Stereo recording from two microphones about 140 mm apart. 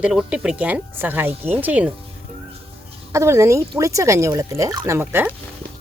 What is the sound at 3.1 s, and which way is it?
Speech, 20° right (ahead or behind).